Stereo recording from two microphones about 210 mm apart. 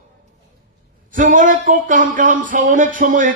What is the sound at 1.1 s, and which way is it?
Speech, 40° right (ahead or behind).